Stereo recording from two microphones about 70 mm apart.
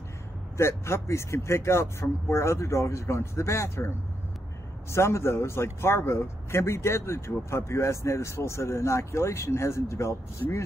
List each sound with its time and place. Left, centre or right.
0.6 s a man's voice: left
4.9 s a man's voice: left